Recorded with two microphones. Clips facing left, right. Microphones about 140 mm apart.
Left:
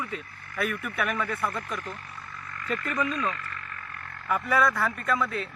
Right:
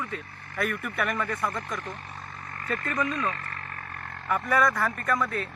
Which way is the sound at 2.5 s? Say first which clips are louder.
Even; 35° right (ahead or behind).